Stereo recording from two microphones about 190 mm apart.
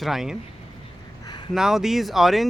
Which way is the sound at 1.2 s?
25° left (ahead or behind).